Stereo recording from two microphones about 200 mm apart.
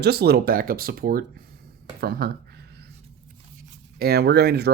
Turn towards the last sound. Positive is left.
turn(degrees=-55)  # may be behind; listen again after turning